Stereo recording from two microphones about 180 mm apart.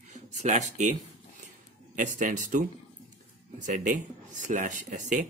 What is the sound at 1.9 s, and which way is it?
Speech, 45° right (ahead or behind).